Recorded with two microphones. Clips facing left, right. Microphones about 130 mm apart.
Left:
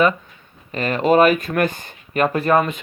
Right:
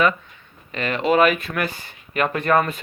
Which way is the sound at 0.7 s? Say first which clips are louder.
Left 3 dB; 40° left (ahead or behind).